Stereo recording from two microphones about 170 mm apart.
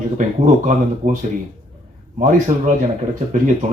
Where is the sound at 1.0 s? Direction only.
50° right (ahead or behind).